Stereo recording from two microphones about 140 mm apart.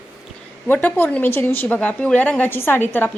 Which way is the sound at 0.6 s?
15° left (ahead or behind).